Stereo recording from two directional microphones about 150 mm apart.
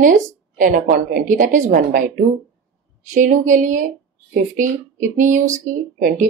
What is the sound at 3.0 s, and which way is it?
Speech, 60° right (ahead or behind).